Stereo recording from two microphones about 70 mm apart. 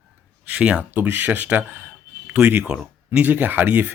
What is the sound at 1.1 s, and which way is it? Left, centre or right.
Speech, right.